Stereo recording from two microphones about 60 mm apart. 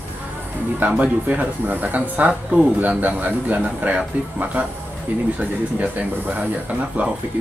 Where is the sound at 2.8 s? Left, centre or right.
Right.